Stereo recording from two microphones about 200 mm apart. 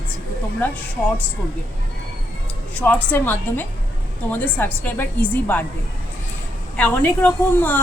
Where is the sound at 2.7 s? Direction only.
10° left (ahead or behind).